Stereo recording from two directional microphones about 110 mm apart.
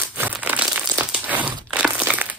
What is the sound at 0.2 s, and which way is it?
Crumpling, 15° right (ahead or behind).